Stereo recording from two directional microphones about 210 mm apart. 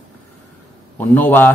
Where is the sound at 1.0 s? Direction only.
10° left (ahead or behind).